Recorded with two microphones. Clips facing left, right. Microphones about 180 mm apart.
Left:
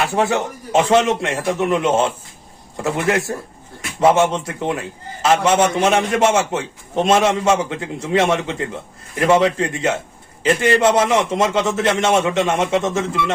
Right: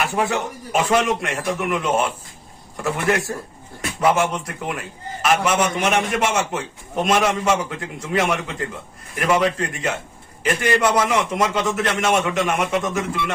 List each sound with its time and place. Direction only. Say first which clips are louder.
0.0 s a man's voice: left 3 dB; 25° left (ahead or behind)